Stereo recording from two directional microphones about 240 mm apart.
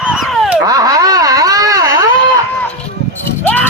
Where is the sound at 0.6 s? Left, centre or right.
Centre.